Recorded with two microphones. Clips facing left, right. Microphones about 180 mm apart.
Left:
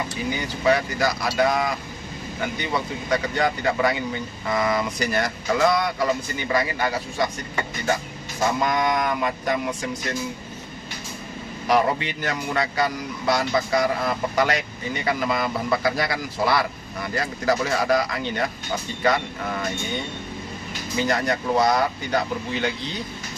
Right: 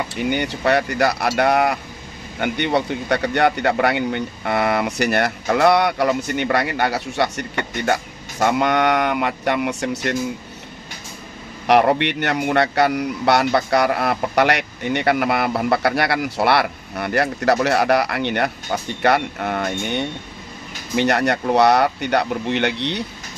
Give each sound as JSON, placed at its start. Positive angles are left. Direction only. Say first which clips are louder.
{"t": 0.1, "sound": "a man's voice", "louder": "right 6 dB", "side_deg": -70}
{"t": 11.6, "sound": "a man's voice", "louder": "right 6 dB", "side_deg": -65}